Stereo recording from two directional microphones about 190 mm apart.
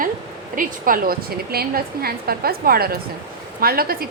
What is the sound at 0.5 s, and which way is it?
A woman's voice, 45° right (ahead or behind).